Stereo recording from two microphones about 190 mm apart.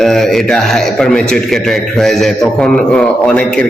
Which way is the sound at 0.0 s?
Centre (ahead or behind).